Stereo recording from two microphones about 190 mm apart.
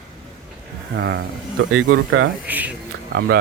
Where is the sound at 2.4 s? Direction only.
10° right (ahead or behind).